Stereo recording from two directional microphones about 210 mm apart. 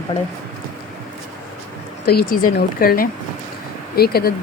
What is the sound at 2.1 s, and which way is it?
Speech, 45° left (ahead or behind).